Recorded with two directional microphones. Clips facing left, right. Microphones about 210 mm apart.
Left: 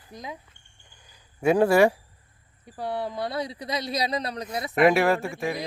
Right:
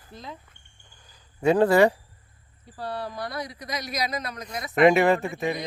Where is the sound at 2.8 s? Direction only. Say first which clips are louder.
Left 3 dB; 20° left (ahead or behind).